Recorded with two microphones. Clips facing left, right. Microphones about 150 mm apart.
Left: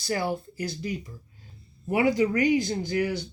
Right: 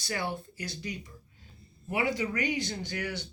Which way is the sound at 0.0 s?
35° left (ahead or behind).